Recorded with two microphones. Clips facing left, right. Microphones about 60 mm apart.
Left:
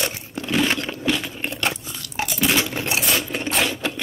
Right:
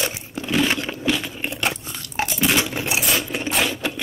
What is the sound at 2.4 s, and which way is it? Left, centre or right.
Coin, centre.